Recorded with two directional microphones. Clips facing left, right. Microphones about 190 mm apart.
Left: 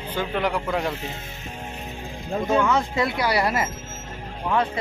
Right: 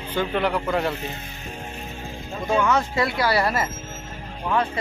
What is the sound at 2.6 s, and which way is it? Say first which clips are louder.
Speech: even; 15° left (ahead or behind).